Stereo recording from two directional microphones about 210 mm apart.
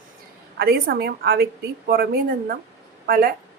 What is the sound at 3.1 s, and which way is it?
Speech, 45° right (ahead or behind).